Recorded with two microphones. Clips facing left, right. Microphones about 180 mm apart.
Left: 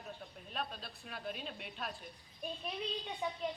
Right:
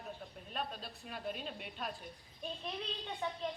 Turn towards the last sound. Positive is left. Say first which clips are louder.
# even
turn(degrees=15)  # may be behind; listen again after turning